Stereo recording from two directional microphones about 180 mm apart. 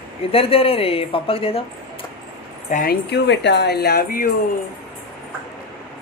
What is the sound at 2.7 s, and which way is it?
Speech, 55° left (ahead or behind).